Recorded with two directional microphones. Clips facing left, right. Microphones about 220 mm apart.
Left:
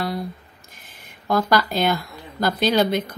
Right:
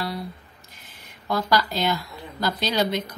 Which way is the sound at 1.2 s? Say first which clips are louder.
Left 3 dB; 55° left (ahead or behind).